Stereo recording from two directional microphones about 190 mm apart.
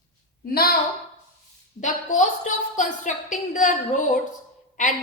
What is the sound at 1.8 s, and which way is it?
A woman's voice, 40° left (ahead or behind).